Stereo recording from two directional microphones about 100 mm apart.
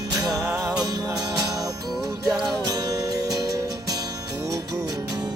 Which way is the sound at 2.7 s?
40° right (ahead or behind).